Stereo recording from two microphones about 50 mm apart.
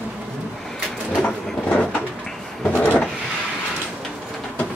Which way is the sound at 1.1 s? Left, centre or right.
Left.